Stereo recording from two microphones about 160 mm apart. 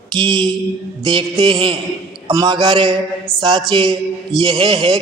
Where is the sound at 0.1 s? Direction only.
30° right (ahead or behind).